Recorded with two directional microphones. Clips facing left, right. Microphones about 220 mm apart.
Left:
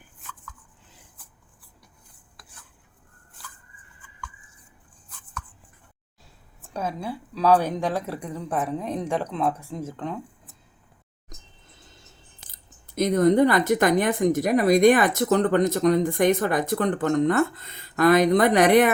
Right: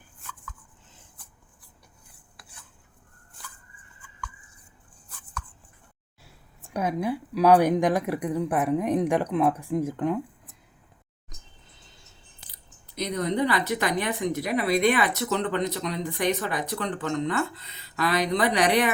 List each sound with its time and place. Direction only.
6.6 s a woman's voice: 15° right (ahead or behind)
12.5 s speech: 50° left (ahead or behind)